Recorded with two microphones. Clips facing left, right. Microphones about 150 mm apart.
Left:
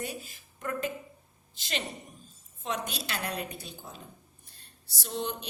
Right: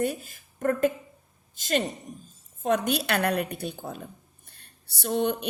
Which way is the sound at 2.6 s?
60° right (ahead or behind).